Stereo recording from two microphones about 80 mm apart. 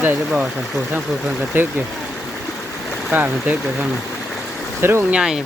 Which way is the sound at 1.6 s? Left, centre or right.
Right.